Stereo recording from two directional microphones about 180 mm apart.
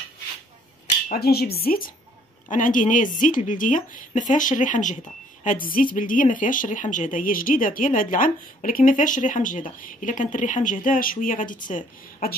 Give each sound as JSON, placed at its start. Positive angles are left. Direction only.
{"t": 1.0, "sound": "a woman's voice", "side_deg": 55}